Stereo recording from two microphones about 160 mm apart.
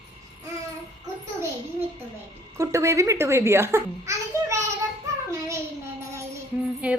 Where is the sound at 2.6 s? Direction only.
20° right (ahead or behind).